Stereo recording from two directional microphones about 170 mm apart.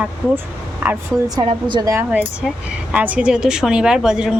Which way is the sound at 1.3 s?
25° right (ahead or behind).